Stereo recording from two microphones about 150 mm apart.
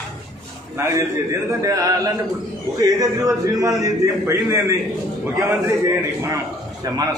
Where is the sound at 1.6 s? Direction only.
25° right (ahead or behind).